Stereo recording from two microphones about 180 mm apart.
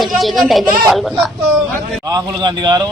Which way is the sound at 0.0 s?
Centre (ahead or behind).